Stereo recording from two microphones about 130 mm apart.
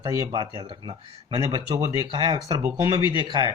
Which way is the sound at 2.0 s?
35° right (ahead or behind).